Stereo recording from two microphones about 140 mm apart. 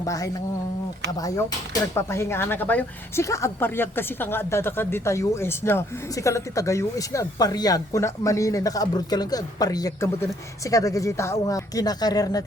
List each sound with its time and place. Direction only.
0.0 s speech: 25° left (ahead or behind)